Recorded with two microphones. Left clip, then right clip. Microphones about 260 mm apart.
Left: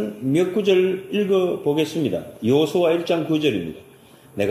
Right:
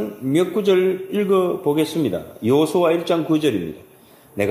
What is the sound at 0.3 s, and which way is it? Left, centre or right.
A man's voice, centre.